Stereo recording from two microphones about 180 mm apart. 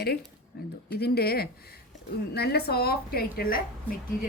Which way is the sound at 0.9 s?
60° left (ahead or behind).